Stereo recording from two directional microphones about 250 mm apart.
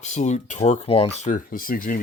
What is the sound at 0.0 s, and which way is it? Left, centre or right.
Speech, left.